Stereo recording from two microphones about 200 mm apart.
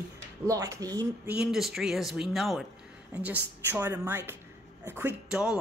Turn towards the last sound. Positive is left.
turn(degrees=-5)  # may be behind; listen again after turning